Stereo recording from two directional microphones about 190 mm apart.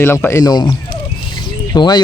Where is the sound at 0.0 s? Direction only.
10° left (ahead or behind).